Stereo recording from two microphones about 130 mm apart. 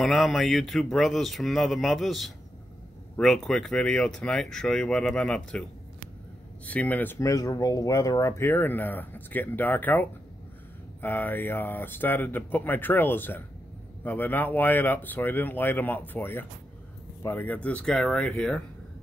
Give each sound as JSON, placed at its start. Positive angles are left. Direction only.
{"t": 0.0, "sound": "speech", "side_deg": 0}
{"t": 7.2, "sound": "speech", "side_deg": 25}